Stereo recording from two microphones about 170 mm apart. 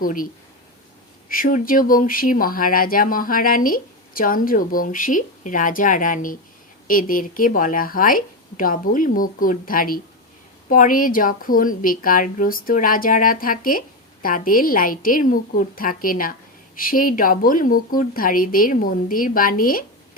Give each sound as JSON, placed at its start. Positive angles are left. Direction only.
{"t": 0.0, "sound": "speech", "side_deg": 55}
{"t": 1.3, "sound": "a woman's voice", "side_deg": 55}